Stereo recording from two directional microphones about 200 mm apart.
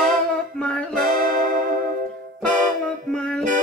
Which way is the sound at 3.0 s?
5° left (ahead or behind).